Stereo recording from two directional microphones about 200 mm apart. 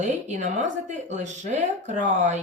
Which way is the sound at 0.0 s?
35° right (ahead or behind).